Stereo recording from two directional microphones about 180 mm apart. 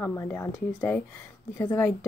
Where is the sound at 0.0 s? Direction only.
10° left (ahead or behind).